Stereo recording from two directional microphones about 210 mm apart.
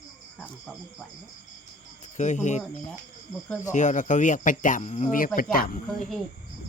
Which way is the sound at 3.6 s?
35° left (ahead or behind).